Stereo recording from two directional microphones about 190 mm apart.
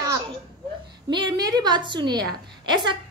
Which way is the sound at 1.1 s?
20° right (ahead or behind).